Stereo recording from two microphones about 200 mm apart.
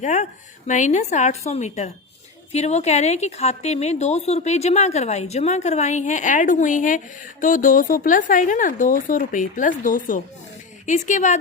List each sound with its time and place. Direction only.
0.0 s a woman's voice: 35° left (ahead or behind)